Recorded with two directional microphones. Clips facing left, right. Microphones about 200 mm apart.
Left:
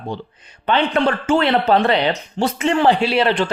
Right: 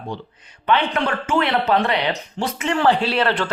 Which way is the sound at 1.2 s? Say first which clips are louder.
Left 4 dB; 30° left (ahead or behind).